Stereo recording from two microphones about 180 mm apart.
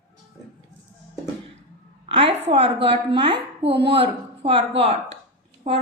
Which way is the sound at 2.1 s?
30° right (ahead or behind).